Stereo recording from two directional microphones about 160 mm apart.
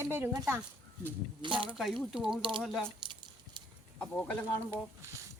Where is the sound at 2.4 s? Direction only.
30° right (ahead or behind).